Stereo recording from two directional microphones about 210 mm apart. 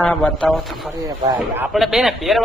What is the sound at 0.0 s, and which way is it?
A man's voice, 5° left (ahead or behind).